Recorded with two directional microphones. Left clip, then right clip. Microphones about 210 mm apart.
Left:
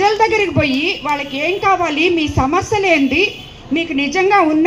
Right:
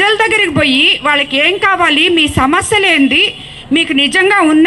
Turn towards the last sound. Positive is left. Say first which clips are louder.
# right 3 dB
turn(degrees=-30)  # may be behind; listen again after turning